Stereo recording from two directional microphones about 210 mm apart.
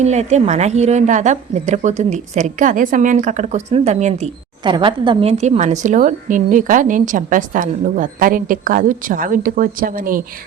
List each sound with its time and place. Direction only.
0.0 s a woman's voice: 30° right (ahead or behind)